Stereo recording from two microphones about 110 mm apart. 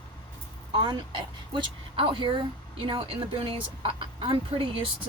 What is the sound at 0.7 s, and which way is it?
Speech, 50° right (ahead or behind).